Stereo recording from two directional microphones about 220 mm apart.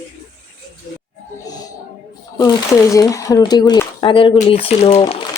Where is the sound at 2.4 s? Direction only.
15° left (ahead or behind).